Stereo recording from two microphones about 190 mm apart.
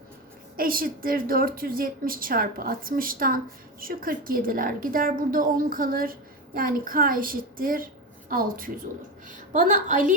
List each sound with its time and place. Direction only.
0.5 s a woman's voice: 50° right (ahead or behind)